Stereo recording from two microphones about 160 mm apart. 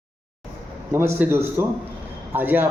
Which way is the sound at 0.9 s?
15° right (ahead or behind).